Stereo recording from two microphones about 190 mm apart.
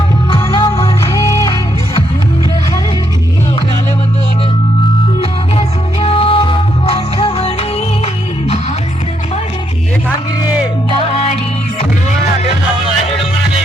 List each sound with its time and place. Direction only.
0.5 s music: 25° left (ahead or behind)
5.2 s music: 30° left (ahead or behind)